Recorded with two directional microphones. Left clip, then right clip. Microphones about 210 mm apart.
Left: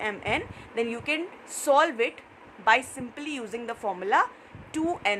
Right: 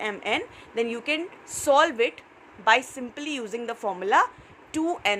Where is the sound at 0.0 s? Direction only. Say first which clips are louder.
Right 1 dB; 15° right (ahead or behind).